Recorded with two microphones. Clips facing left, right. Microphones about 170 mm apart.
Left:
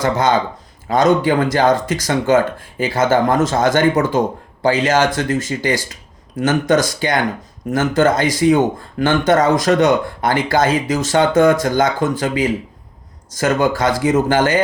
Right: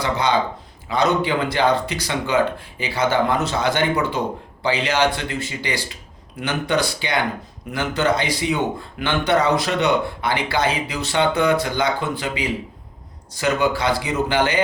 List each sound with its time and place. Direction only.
0.0 s speech: 45° left (ahead or behind)